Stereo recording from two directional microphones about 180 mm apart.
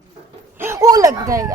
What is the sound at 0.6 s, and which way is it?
Speech, 15° right (ahead or behind).